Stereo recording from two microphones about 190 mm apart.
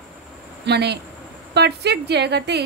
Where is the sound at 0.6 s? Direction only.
60° right (ahead or behind).